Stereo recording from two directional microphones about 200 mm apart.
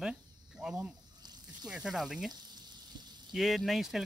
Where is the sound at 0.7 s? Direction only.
20° right (ahead or behind).